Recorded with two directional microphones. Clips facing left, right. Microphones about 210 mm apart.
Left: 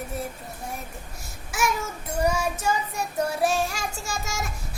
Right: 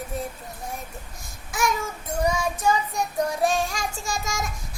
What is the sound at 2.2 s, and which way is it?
Child singing, 10° left (ahead or behind).